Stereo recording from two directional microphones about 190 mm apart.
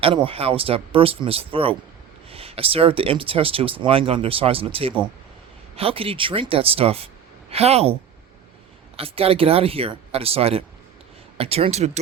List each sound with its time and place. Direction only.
0.3 s speech: 30° right (ahead or behind)
9.0 s speech: 30° right (ahead or behind)